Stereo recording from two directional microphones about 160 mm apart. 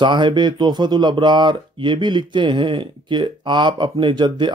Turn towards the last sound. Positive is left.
turn(degrees=-30)  # may be behind; listen again after turning